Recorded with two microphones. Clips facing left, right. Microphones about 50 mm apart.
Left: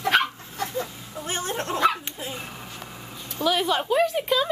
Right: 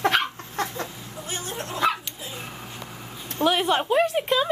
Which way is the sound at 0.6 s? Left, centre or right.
Right.